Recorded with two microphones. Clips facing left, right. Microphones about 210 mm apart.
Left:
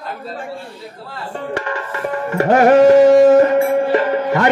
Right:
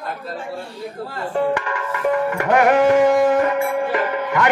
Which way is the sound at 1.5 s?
35° left (ahead or behind).